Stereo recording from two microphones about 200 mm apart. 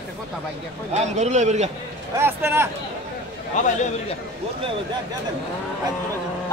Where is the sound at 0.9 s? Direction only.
35° right (ahead or behind).